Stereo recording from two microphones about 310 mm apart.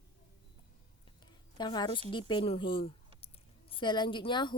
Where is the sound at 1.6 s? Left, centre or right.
Centre.